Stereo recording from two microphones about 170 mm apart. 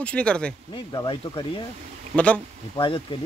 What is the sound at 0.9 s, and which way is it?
Speech, 25° left (ahead or behind).